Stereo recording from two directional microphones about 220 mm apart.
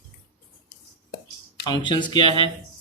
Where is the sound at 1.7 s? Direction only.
20° left (ahead or behind).